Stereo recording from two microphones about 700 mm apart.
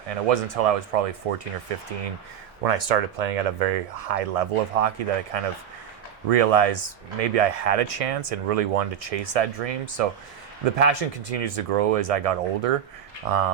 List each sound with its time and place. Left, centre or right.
0.1 s speech: right
2.6 s speech: right